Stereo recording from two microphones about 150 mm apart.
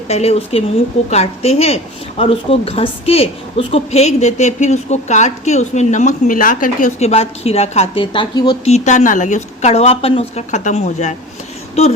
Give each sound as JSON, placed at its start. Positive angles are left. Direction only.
{"t": 0.1, "sound": "a woman's voice", "side_deg": 45}
{"t": 8.6, "sound": "a woman's voice", "side_deg": 50}